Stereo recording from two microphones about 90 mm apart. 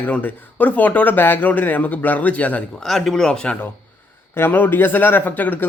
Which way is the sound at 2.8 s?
5° left (ahead or behind).